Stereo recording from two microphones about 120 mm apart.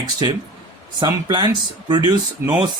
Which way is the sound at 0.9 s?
40° right (ahead or behind).